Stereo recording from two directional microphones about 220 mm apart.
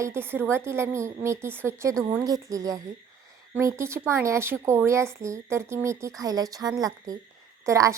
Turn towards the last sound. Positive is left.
turn(degrees=-15)  # may be behind; listen again after turning